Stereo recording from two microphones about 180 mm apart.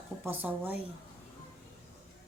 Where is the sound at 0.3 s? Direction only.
10° right (ahead or behind).